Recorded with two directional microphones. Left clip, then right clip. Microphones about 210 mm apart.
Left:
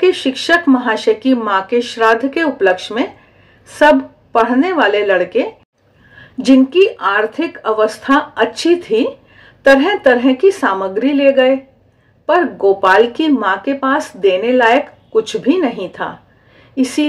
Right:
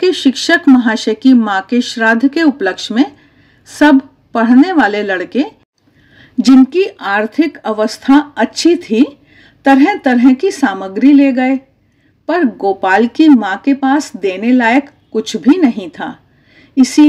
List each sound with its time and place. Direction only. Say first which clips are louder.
0.0 s speech: right 1 dB; 35° right (ahead or behind)
4.3 s speech: right 2 dB; 35° right (ahead or behind)